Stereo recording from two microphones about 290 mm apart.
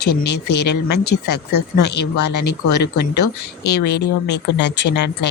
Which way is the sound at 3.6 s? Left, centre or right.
Left.